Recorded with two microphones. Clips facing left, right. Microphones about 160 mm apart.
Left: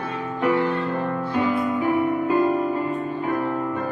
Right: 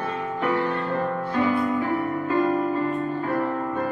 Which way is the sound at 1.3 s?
20° left (ahead or behind).